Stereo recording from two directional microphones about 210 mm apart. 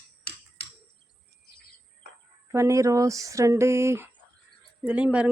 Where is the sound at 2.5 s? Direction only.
15° right (ahead or behind).